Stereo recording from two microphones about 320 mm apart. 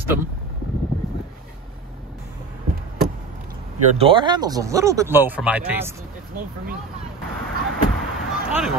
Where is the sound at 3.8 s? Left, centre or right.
Centre.